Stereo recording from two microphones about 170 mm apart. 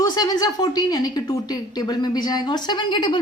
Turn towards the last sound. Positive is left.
turn(degrees=25)  # may be behind; listen again after turning